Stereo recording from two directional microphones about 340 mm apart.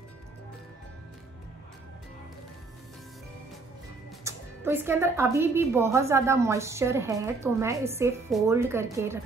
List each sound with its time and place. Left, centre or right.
4.2 s speech: centre